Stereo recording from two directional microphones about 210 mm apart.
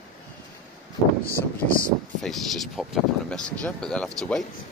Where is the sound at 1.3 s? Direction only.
45° left (ahead or behind).